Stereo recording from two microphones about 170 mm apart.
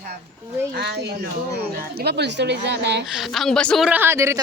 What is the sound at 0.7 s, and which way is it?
Speech, 75° right (ahead or behind).